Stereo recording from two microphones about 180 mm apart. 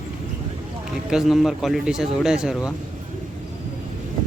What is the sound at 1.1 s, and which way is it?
Speech, centre (ahead or behind).